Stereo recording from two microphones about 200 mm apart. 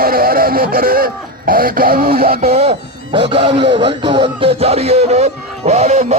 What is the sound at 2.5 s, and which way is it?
Speech, 30° right (ahead or behind).